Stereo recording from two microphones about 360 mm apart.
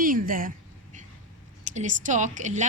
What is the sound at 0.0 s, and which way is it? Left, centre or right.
Speech, right.